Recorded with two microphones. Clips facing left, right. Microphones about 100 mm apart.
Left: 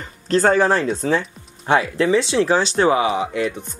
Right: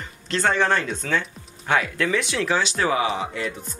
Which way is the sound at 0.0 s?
40° left (ahead or behind).